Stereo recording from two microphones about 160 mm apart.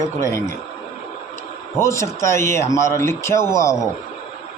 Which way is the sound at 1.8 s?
20° left (ahead or behind).